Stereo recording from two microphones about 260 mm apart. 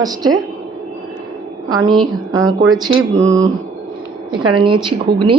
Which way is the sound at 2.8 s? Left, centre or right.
Centre.